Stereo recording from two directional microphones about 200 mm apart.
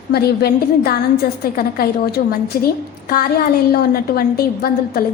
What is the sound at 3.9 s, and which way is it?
A woman's voice, 50° left (ahead or behind).